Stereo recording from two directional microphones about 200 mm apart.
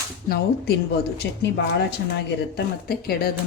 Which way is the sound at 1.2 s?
60° left (ahead or behind).